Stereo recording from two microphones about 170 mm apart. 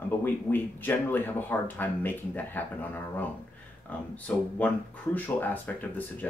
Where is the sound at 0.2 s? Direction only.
10° left (ahead or behind).